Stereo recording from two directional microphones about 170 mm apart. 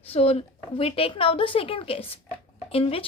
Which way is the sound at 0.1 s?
35° left (ahead or behind).